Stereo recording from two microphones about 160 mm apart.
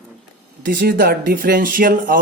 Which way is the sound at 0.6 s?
60° right (ahead or behind).